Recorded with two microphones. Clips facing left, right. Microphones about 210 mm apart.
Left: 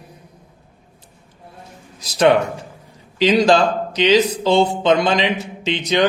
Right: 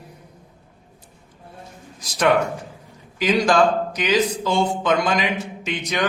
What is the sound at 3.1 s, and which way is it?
A man's voice, 25° left (ahead or behind).